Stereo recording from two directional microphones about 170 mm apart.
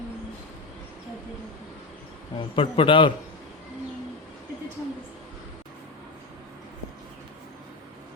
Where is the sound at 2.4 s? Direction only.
30° left (ahead or behind).